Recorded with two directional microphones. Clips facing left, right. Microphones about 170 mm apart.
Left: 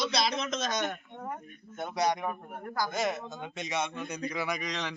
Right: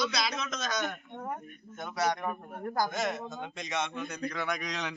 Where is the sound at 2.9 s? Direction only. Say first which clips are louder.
Left 1 dB; centre (ahead or behind).